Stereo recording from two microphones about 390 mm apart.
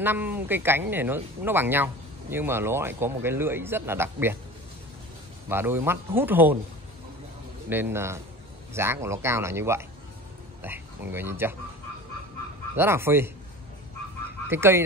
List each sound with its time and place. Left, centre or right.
0.0 s speech: centre
5.5 s speech: centre
7.7 s speech: centre
12.7 s speech: centre
14.5 s speech: centre